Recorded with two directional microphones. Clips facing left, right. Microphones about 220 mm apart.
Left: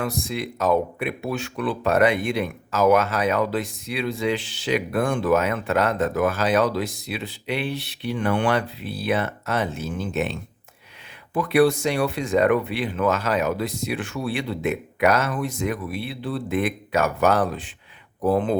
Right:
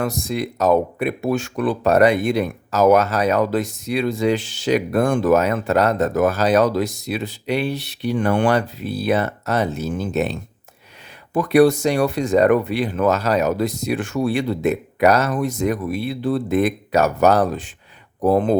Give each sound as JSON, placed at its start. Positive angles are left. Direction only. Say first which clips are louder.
{"t": 0.0, "sound": "speech", "louder": "right 4 dB", "side_deg": -40}